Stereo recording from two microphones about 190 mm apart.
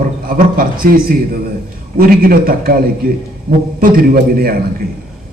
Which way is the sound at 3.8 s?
50° right (ahead or behind).